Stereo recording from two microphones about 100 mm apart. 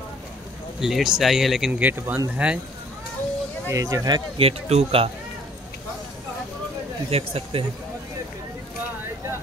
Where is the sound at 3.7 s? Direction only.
35° right (ahead or behind).